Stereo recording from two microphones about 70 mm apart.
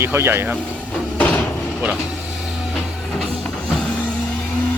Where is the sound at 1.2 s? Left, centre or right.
Left.